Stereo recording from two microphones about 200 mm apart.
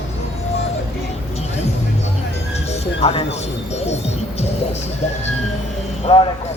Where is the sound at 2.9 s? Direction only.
30° left (ahead or behind).